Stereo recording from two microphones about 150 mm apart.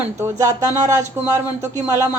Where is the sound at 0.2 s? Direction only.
15° right (ahead or behind).